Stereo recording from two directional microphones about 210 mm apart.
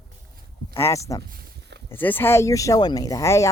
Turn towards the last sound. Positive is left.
turn(degrees=15)  # may be behind; listen again after turning